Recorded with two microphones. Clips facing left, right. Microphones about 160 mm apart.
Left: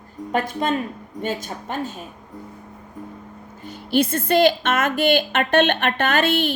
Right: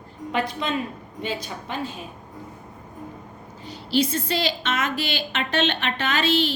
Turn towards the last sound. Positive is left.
turn(degrees=55)  # may be behind; listen again after turning